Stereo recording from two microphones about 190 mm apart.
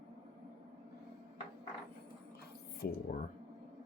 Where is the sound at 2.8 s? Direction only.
55° left (ahead or behind).